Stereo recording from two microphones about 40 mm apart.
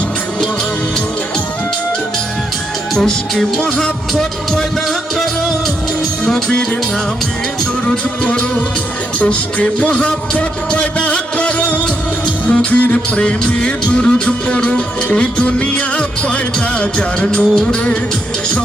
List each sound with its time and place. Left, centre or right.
2.9 s music: centre
8.2 s music: left
17.3 s music: left